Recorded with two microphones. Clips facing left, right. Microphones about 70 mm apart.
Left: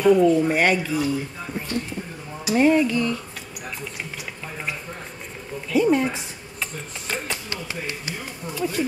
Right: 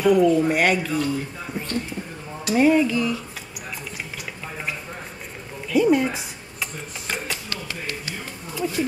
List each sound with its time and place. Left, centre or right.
0.0 s speech: centre
5.7 s speech: centre
7.2 s a sound: left
8.5 s speech: centre